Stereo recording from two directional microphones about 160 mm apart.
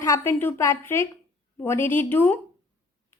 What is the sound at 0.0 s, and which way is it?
A woman's voice, 15° left (ahead or behind).